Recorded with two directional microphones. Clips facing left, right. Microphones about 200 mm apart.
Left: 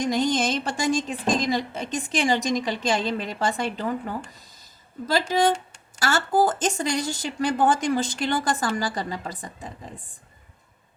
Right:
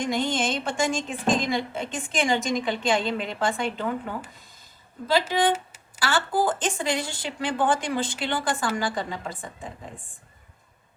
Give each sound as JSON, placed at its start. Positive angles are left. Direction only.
{"t": 0.0, "sound": "speech", "side_deg": 40}
{"t": 4.3, "sound": "a sound", "side_deg": 40}
{"t": 5.3, "sound": "speech", "side_deg": 45}